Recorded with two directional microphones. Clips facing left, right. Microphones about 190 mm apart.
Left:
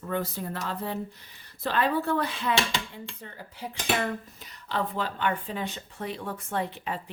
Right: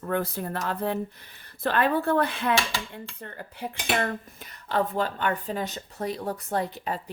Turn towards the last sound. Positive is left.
turn(degrees=-40)  # may be behind; listen again after turning